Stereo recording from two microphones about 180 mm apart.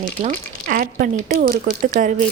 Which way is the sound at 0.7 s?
50° right (ahead or behind).